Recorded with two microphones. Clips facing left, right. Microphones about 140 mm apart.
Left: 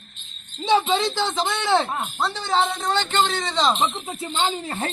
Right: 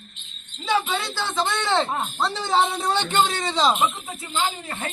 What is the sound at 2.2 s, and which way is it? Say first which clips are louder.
A man's voice: even; centre (ahead or behind).